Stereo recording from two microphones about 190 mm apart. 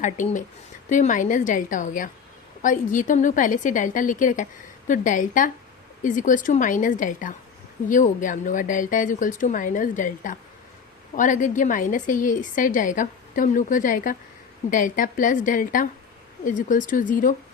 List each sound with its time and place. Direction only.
0.0 s a woman's voice: 40° left (ahead or behind)